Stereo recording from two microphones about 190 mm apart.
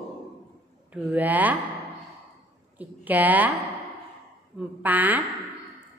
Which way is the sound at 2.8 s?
10° right (ahead or behind).